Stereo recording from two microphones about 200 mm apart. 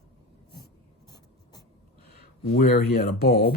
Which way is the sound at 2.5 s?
50° left (ahead or behind).